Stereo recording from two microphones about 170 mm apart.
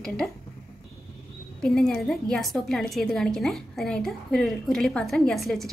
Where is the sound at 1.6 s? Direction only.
5° left (ahead or behind).